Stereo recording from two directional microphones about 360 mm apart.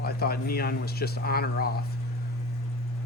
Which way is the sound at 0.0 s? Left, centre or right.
Left.